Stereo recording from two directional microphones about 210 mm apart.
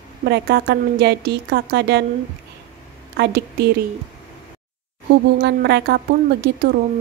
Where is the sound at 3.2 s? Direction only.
50° right (ahead or behind).